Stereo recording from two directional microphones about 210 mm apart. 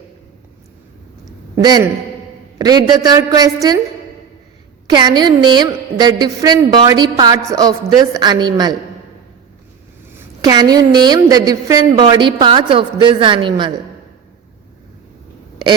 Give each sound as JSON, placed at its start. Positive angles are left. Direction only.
{"t": 1.6, "sound": "a woman's voice", "side_deg": -20}
{"t": 4.9, "sound": "a woman's voice", "side_deg": -20}
{"t": 10.2, "sound": "a woman's voice", "side_deg": -20}